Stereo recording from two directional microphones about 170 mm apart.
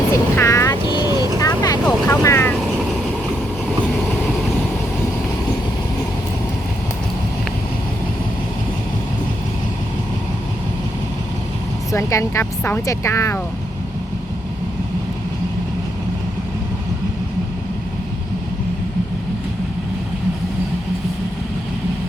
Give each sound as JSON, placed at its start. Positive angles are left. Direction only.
{"t": 0.1, "sound": "vehicle", "side_deg": 15}
{"t": 2.0, "sound": "speech", "side_deg": 15}
{"t": 11.9, "sound": "speech", "side_deg": 15}